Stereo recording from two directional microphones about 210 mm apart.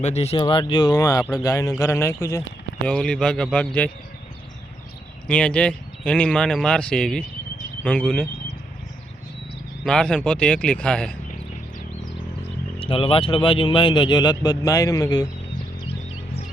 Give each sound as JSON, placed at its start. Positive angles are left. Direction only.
{"t": 0.0, "sound": "speech", "side_deg": 30}
{"t": 5.3, "sound": "speech", "side_deg": 5}
{"t": 9.8, "sound": "speech", "side_deg": 5}
{"t": 12.8, "sound": "speech", "side_deg": 25}